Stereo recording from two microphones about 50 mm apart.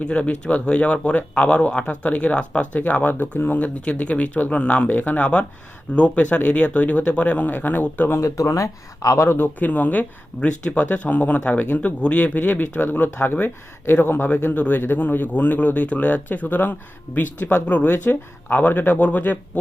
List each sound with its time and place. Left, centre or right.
0.0 s speech: left
8.2 s speech: left
9.1 s speech: left
9.6 s speech: left